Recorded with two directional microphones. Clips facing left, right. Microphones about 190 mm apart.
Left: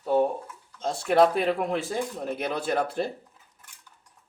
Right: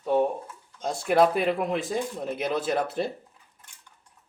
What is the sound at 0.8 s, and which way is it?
Speech, 5° right (ahead or behind).